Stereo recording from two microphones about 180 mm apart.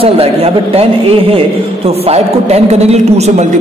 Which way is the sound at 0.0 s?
35° right (ahead or behind).